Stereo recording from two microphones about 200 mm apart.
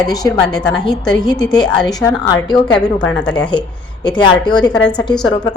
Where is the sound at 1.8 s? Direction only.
20° left (ahead or behind).